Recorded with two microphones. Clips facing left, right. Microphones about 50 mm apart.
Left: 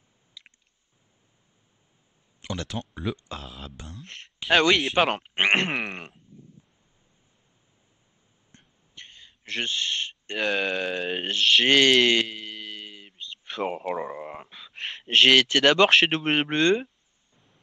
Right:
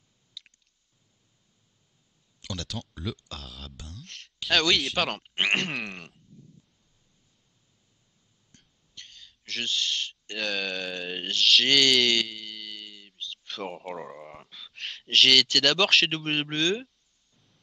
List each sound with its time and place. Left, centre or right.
0.4 s squish: left
2.4 s speech: left
8.5 s a sound: left
11.1 s speech: centre
11.3 s a sound: left
13.8 s speech: left